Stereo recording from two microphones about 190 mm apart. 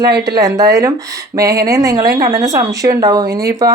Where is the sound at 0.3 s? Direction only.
20° right (ahead or behind).